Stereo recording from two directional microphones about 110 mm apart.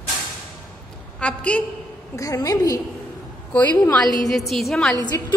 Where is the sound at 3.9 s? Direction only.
5° left (ahead or behind).